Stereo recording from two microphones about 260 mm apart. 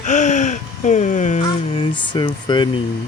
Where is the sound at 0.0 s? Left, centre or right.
Left.